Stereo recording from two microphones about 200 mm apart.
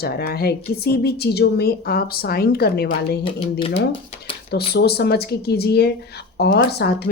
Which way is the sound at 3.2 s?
25° left (ahead or behind).